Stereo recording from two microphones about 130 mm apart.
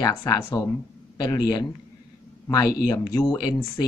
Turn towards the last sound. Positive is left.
turn(degrees=30)  # may be behind; listen again after turning